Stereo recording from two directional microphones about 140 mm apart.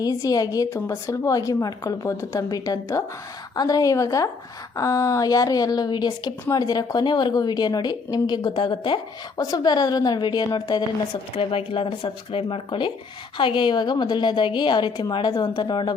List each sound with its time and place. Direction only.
0.0 s a woman's voice: 25° left (ahead or behind)